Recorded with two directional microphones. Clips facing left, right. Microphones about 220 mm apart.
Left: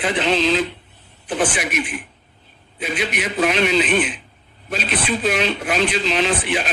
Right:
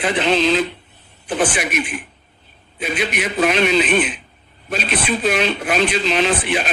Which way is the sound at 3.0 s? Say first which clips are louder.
Right 2 dB; 55° right (ahead or behind).